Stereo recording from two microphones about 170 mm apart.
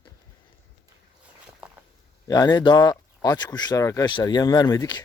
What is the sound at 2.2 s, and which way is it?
Speech, 20° left (ahead or behind).